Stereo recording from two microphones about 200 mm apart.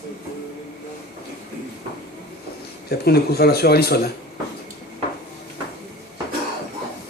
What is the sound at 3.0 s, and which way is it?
Speech, 50° left (ahead or behind).